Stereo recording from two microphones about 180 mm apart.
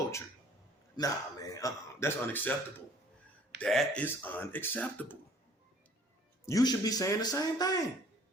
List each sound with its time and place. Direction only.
0.9 s speech: 20° left (ahead or behind)
3.6 s speech: 5° left (ahead or behind)
6.4 s speech: 20° left (ahead or behind)